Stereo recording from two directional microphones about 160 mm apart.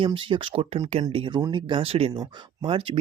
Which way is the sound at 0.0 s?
30° right (ahead or behind).